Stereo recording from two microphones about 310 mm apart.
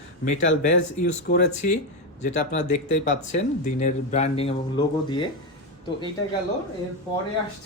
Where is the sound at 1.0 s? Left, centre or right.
Left.